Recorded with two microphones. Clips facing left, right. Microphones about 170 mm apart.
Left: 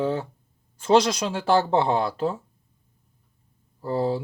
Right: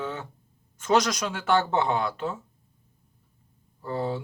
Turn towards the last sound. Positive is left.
turn(degrees=35)  # may be behind; listen again after turning